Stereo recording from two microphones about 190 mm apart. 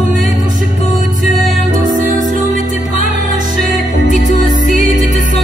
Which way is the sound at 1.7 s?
40° right (ahead or behind).